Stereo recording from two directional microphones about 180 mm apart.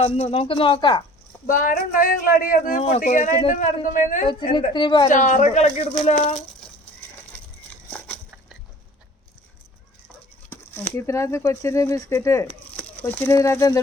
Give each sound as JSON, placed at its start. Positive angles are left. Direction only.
{"t": 0.0, "sound": "speech", "side_deg": 35}
{"t": 1.5, "sound": "speech", "side_deg": 45}
{"t": 4.7, "sound": "a woman's voice", "side_deg": 25}
{"t": 5.0, "sound": "speech", "side_deg": 45}
{"t": 7.9, "sound": "crushing", "side_deg": 10}
{"t": 10.5, "sound": "speech", "side_deg": 15}